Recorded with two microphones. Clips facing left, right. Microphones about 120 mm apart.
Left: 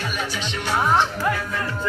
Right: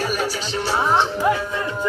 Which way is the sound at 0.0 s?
40° right (ahead or behind).